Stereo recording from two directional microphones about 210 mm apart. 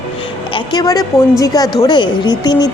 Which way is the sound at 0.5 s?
20° left (ahead or behind).